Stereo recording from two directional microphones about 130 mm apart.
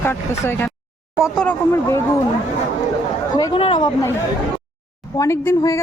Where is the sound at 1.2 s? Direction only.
5° left (ahead or behind).